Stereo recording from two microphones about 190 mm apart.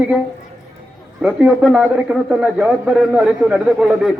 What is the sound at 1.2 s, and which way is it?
A man's voice, centre (ahead or behind).